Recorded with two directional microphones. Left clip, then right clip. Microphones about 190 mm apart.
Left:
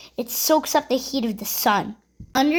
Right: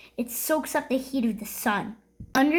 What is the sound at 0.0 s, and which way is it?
A woman's voice, 40° left (ahead or behind).